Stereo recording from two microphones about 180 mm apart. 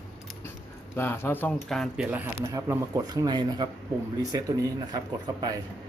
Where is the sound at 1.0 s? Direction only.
10° left (ahead or behind).